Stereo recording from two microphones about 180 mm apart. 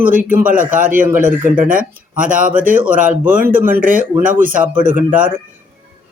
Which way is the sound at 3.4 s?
10° right (ahead or behind).